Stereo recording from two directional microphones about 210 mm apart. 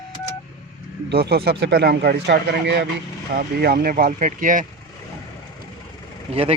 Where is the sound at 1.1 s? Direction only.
50° right (ahead or behind).